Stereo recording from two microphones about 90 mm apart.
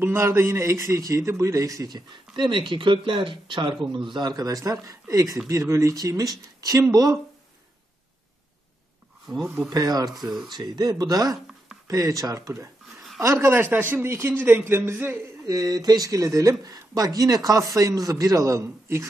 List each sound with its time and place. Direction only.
0.0 s a man's voice: 25° right (ahead or behind); by 4.3 s 65° right (ahead or behind)
4.3 s a man's voice: 40° right (ahead or behind)
9.7 s speech: 45° right (ahead or behind)
10.1 s speech: centre (ahead or behind)
10.5 s a man's voice: 45° right (ahead or behind)
13.5 s a man's voice: 20° right (ahead or behind)
15.4 s a man's voice: 45° right (ahead or behind)